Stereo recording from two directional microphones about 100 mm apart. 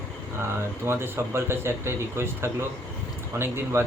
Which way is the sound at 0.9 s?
25° right (ahead or behind).